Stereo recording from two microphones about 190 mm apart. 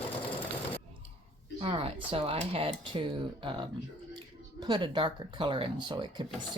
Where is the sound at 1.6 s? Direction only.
30° right (ahead or behind).